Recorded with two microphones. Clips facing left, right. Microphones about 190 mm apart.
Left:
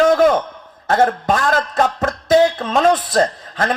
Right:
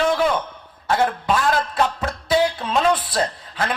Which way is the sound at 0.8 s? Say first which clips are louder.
Left 4 dB; 45° left (ahead or behind).